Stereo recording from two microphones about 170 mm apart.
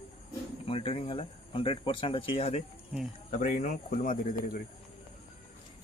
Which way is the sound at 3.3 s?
50° left (ahead or behind).